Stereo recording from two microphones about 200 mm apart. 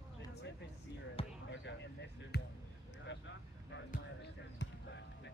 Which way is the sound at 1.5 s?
65° left (ahead or behind).